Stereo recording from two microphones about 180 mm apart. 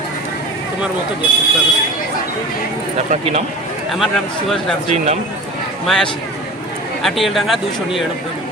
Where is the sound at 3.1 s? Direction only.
35° right (ahead or behind).